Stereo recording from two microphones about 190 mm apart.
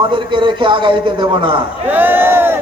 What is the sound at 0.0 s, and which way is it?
A man's voice, 25° right (ahead or behind).